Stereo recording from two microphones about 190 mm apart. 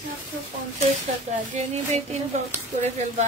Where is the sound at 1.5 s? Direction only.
35° right (ahead or behind).